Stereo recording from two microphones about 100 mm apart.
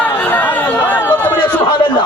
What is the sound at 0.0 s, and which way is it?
Chatter, 15° left (ahead or behind).